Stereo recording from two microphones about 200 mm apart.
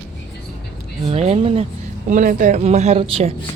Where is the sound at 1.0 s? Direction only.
30° right (ahead or behind).